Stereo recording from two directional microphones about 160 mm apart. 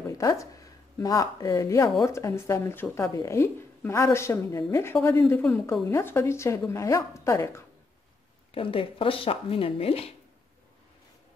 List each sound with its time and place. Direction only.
0.2 s a woman's voice: 20° left (ahead or behind)
5.3 s speech: 10° left (ahead or behind)
8.5 s speech: 35° left (ahead or behind)